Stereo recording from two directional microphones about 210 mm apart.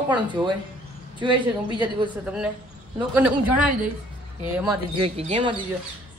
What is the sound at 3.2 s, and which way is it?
Speech, 5° right (ahead or behind).